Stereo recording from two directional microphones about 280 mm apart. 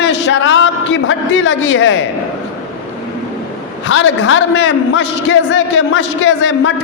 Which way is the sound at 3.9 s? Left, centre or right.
Left.